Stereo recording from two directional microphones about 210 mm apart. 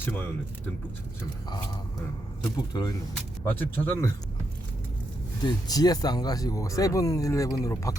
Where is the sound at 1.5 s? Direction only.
20° left (ahead or behind).